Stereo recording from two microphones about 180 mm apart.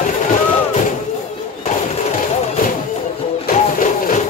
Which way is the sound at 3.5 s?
45° left (ahead or behind).